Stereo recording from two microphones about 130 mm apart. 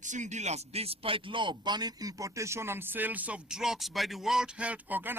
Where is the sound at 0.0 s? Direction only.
70° right (ahead or behind).